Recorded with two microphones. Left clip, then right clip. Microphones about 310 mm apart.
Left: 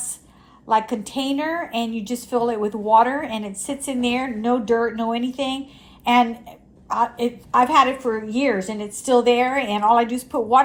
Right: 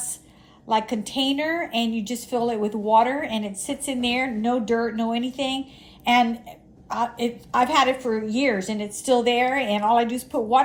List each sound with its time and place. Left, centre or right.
0.8 s a woman's voice: centre
4.7 s speech: left
5.3 s a woman's voice: centre